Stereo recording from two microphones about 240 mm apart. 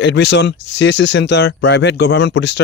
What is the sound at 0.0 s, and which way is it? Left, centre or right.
Speech, left.